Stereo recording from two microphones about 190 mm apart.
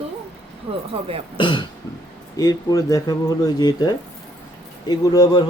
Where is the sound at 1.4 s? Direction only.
25° left (ahead or behind).